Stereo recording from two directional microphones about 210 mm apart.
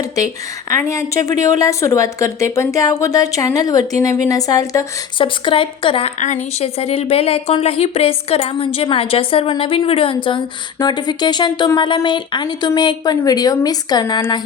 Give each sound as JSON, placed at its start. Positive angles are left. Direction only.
{"t": 0.7, "sound": "a woman's voice", "side_deg": 15}